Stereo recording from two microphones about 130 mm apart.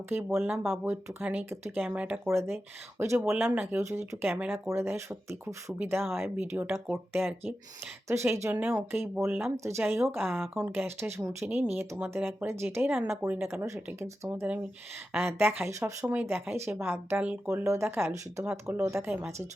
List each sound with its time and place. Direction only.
0.1 s speech: 15° right (ahead or behind)